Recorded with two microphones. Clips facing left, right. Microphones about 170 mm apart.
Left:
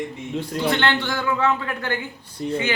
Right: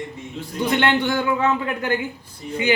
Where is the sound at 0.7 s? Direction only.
15° right (ahead or behind).